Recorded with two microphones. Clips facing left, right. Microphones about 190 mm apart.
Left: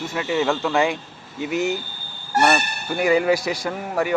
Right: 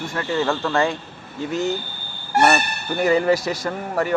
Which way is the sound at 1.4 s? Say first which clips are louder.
Even; 15° left (ahead or behind).